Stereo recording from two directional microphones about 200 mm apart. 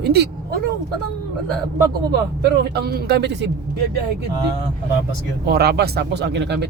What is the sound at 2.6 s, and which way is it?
Speech, 55° right (ahead or behind).